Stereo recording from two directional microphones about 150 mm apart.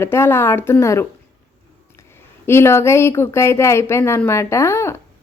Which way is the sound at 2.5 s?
15° left (ahead or behind).